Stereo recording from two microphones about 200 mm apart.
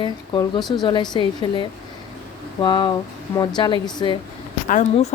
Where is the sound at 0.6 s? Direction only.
Centre (ahead or behind).